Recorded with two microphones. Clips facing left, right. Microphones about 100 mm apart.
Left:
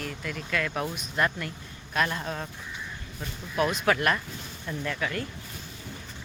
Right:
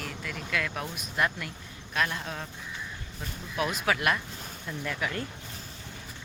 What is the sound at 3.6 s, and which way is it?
Speech, centre (ahead or behind).